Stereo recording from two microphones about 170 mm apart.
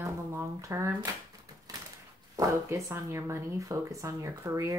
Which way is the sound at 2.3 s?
20° right (ahead or behind).